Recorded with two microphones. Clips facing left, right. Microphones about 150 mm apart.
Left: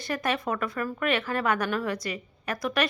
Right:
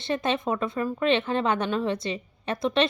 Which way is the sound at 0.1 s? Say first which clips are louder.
Right 3 dB; 25° right (ahead or behind).